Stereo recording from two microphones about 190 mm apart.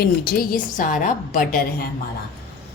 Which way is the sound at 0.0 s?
55° left (ahead or behind).